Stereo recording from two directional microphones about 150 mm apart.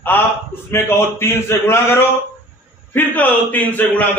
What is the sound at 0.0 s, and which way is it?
A man's voice, 15° left (ahead or behind).